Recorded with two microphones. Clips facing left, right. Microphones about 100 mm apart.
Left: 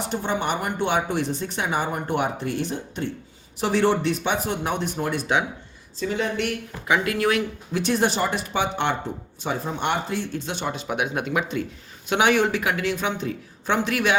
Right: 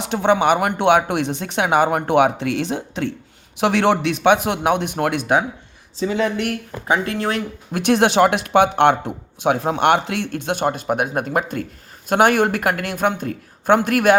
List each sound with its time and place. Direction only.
0.0 s speech: 85° right
3.6 s speech: 70° right (ahead or behind)
6.0 s speech: 90° right
6.8 s speech: 35° right (ahead or behind)
7.7 s speech: 65° right (ahead or behind)